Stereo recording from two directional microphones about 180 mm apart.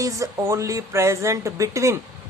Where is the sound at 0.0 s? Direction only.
15° right (ahead or behind).